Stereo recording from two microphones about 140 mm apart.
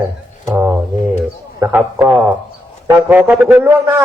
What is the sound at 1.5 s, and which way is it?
A man's voice, 15° right (ahead or behind).